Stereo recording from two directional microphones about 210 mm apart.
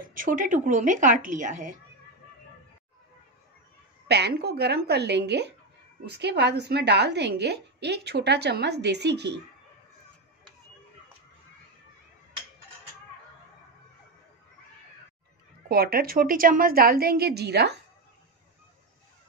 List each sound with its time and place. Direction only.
0.1 s speech: 40° right (ahead or behind)
4.1 s a woman's voice: 50° right (ahead or behind)
15.7 s a woman's voice: 45° right (ahead or behind)